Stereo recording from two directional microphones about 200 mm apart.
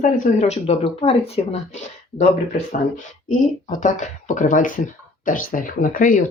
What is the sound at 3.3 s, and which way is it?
Speech, 40° left (ahead or behind).